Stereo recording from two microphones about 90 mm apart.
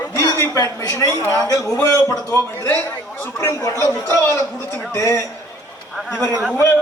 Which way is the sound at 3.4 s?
35° left (ahead or behind).